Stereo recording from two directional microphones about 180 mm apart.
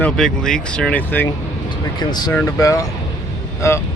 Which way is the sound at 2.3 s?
15° left (ahead or behind).